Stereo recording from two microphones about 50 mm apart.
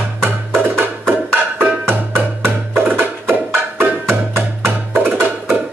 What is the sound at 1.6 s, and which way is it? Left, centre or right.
Music, right.